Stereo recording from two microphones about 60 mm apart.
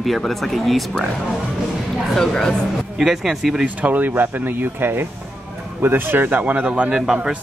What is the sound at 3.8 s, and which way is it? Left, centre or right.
Speech, right.